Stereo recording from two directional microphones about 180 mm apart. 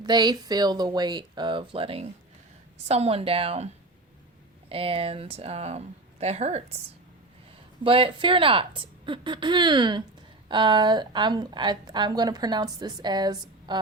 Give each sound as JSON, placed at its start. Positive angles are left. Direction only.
{"t": 0.0, "sound": "a woman's voice", "side_deg": -25}
{"t": 4.7, "sound": "speech", "side_deg": -30}
{"t": 7.9, "sound": "a woman's voice", "side_deg": -30}